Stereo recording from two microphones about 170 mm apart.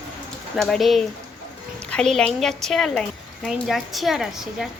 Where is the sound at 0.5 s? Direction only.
Centre (ahead or behind).